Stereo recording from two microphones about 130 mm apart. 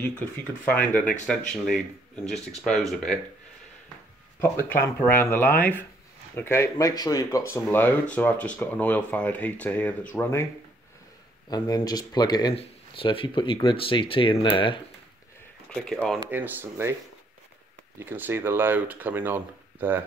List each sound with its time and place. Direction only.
0.7 s speech: 10° left (ahead or behind)
4.4 s speech: 15° left (ahead or behind)
11.4 s speech: 30° left (ahead or behind)
12.5 s speech: 45° left (ahead or behind)
15.7 s speech: 5° left (ahead or behind)
16.3 s speech: 15° right (ahead or behind)
17.9 s speech: 15° right (ahead or behind)